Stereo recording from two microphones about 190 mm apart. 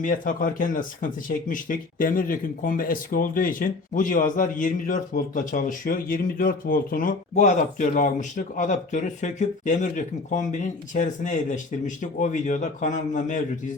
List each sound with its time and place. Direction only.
0.0 s speech: 45° left (ahead or behind)